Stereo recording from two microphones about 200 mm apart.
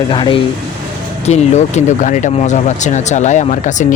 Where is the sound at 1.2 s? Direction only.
35° left (ahead or behind).